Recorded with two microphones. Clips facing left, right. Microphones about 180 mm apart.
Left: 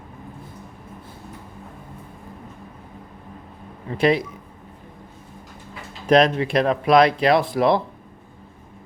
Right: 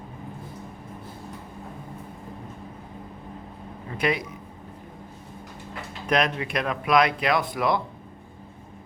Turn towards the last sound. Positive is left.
turn(degrees=30)  # may be behind; listen again after turning